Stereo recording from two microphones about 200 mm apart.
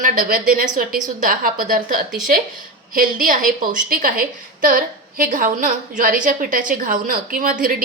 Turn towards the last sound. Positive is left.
turn(degrees=-45)  # may be behind; listen again after turning